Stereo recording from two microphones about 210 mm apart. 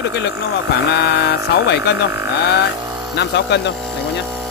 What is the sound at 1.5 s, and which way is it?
Speech, 50° left (ahead or behind).